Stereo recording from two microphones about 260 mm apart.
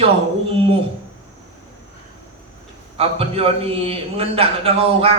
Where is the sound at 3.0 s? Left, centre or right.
Right.